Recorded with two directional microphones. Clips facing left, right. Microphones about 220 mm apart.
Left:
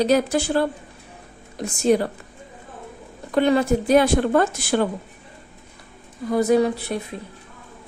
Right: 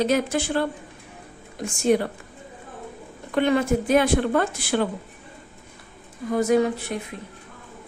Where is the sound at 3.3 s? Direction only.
35° left (ahead or behind).